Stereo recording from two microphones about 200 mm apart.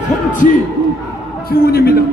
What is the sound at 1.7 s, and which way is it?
Speech, 50° left (ahead or behind).